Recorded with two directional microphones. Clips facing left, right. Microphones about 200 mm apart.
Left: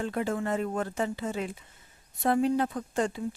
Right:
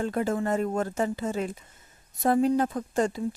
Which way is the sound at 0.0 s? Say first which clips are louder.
Right 3 dB; 40° right (ahead or behind).